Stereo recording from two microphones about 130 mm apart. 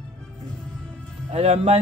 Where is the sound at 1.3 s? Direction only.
55° right (ahead or behind).